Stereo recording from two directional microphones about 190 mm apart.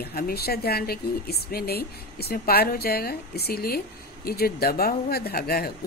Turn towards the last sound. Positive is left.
turn(degrees=55)  # may be behind; listen again after turning